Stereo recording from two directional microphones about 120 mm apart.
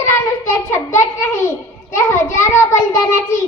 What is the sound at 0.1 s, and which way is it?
A child's voice, 25° left (ahead or behind).